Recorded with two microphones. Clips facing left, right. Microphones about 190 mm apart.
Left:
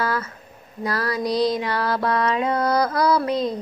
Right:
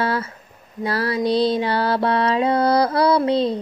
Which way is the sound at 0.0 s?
30° right (ahead or behind).